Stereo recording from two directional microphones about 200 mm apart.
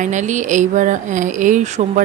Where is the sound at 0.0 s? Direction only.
35° right (ahead or behind).